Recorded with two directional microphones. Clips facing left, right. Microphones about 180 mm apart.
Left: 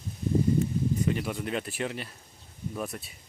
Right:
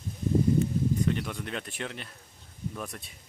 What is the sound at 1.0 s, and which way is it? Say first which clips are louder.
Speech: left 1 dB; 5° left (ahead or behind).